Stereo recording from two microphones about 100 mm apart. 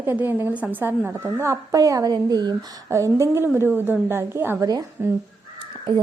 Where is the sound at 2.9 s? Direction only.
30° right (ahead or behind).